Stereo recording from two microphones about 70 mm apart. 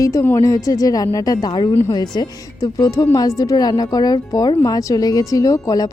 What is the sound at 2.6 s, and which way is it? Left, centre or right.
Speech, left.